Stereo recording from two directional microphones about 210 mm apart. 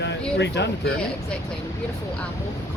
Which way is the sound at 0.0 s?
55° left (ahead or behind).